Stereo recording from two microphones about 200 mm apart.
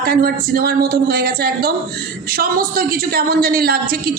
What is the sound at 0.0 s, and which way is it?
A woman's voice, 50° right (ahead or behind).